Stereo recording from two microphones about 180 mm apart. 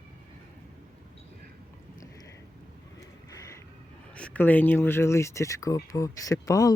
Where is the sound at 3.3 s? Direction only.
15° left (ahead or behind).